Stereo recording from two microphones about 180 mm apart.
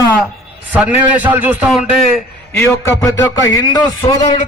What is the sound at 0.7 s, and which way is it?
A man's voice, 10° right (ahead or behind).